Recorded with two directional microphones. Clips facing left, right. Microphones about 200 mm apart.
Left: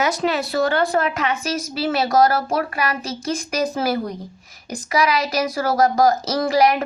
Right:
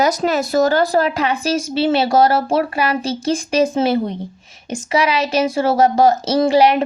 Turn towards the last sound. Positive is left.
turn(degrees=-30)  # may be behind; listen again after turning